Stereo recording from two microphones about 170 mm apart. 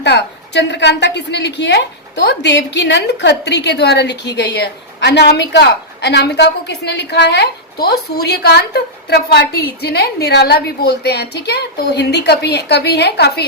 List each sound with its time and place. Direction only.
0.0 s a woman's voice: 90° left; by 13.4 s 70° left (ahead or behind)